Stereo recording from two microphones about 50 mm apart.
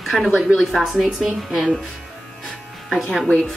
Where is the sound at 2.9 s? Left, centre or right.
Centre.